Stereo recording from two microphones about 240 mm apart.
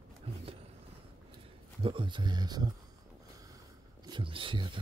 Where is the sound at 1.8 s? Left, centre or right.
Centre.